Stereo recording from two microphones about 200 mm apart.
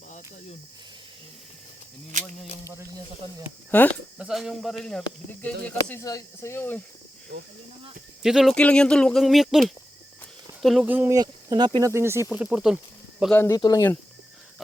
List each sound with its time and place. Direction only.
3.7 s speech: 10° left (ahead or behind)
4.2 s speech: centre (ahead or behind)
5.6 s speech: 10° left (ahead or behind)
8.2 s speech: centre (ahead or behind)
13.3 s speech: 10° left (ahead or behind)